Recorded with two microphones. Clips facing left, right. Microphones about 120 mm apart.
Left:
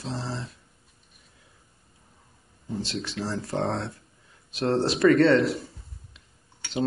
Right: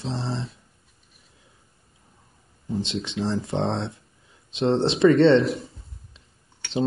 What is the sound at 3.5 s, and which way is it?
Speech, centre (ahead or behind).